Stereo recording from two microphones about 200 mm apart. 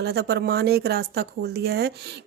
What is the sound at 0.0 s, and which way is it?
Speech, 55° right (ahead or behind).